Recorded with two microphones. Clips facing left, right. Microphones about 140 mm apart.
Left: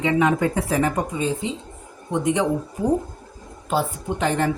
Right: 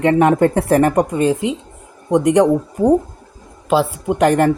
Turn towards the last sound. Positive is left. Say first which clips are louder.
# right 8 dB
turn(degrees=-65)  # may be behind; listen again after turning